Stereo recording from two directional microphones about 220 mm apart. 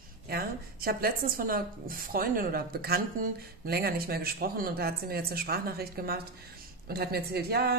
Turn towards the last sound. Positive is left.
turn(degrees=-45)  # may be behind; listen again after turning